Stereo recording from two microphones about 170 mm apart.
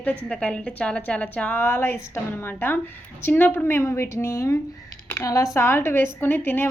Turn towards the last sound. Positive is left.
turn(degrees=10)  # may be behind; listen again after turning